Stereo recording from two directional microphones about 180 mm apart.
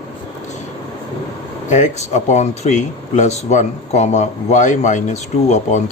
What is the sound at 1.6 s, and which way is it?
Speech, 40° left (ahead or behind).